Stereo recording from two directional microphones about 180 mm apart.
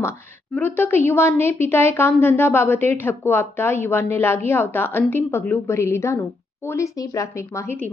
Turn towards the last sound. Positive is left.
turn(degrees=15)  # may be behind; listen again after turning